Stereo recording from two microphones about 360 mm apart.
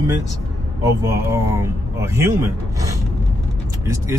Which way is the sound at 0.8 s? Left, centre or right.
Centre.